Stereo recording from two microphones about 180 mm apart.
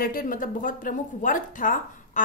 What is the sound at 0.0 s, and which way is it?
A woman's voice, 55° left (ahead or behind).